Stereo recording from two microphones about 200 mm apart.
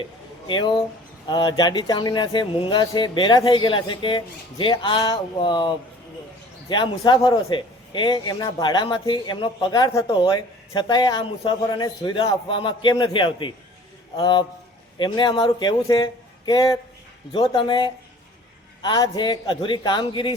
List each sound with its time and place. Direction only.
0.0 s a man's voice: 25° left (ahead or behind)